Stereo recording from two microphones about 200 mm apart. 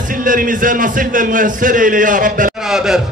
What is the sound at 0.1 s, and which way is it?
A man's voice, 40° right (ahead or behind).